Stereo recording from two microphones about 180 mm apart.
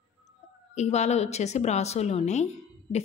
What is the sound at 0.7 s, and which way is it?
A woman's voice, 40° left (ahead or behind).